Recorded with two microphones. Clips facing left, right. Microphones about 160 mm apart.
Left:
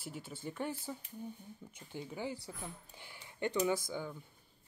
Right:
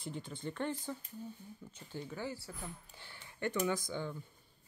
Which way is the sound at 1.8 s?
15° left (ahead or behind).